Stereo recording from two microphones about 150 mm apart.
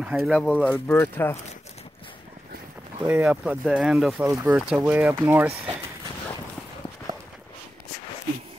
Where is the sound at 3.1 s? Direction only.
10° right (ahead or behind).